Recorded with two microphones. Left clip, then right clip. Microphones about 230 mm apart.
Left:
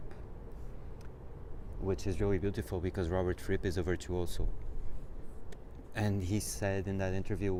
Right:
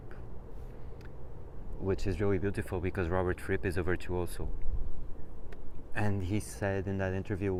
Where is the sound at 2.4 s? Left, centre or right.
Centre.